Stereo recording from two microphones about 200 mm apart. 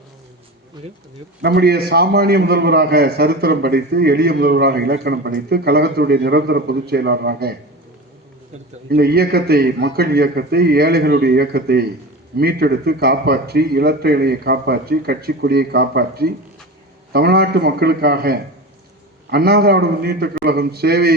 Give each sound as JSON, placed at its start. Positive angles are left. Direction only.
{"t": 1.4, "sound": "a man's voice", "side_deg": -55}
{"t": 8.9, "sound": "a man's voice", "side_deg": -50}